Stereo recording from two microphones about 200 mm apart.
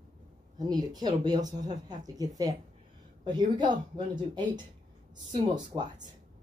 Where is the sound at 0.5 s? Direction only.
20° right (ahead or behind).